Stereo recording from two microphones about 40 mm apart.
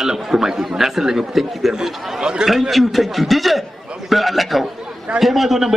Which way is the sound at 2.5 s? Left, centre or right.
Centre.